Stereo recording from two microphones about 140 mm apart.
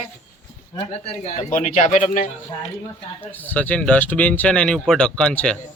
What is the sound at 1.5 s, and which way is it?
Speech, 60° left (ahead or behind).